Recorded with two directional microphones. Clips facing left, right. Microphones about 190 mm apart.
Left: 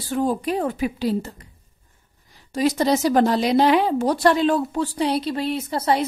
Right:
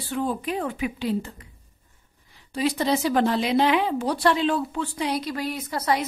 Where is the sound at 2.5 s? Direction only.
45° left (ahead or behind).